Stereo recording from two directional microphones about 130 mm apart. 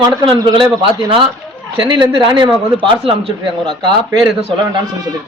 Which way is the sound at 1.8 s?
40° right (ahead or behind).